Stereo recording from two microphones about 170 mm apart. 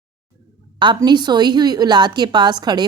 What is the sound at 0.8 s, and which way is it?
A woman's voice, 25° right (ahead or behind).